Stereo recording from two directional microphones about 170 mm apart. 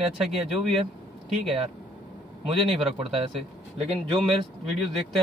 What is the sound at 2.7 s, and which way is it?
Speech, 35° right (ahead or behind).